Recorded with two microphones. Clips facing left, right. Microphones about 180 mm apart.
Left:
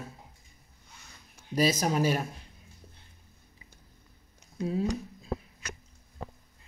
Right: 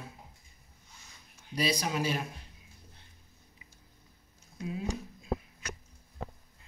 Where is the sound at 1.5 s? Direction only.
45° left (ahead or behind).